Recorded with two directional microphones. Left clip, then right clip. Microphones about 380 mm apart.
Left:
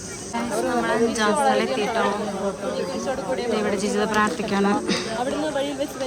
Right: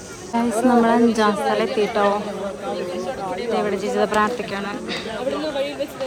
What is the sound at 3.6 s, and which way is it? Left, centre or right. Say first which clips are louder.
Speech: right 2 dB; centre.